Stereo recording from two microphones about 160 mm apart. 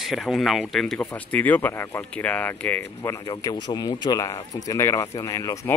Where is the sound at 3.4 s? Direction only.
25° left (ahead or behind).